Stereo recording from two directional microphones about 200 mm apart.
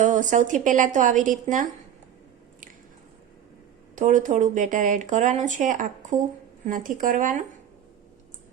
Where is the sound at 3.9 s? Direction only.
40° right (ahead or behind).